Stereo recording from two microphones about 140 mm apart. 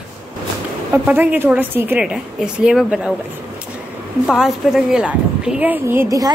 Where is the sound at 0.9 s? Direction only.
15° right (ahead or behind).